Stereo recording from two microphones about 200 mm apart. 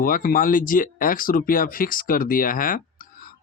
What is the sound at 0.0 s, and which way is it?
Speech, 45° left (ahead or behind).